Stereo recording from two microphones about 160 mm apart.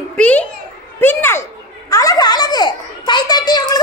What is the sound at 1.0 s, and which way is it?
Children playing, 15° left (ahead or behind).